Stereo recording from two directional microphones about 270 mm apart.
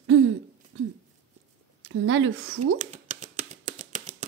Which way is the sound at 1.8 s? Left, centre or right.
Right.